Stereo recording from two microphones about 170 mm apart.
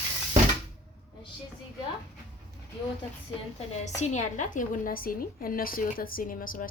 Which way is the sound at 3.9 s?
45° left (ahead or behind).